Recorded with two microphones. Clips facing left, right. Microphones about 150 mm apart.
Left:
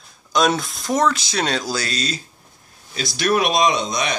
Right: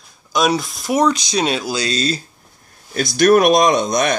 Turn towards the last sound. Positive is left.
turn(degrees=-50)  # may be behind; listen again after turning